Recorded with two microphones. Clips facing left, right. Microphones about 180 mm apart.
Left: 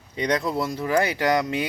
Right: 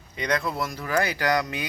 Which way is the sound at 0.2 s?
30° left (ahead or behind).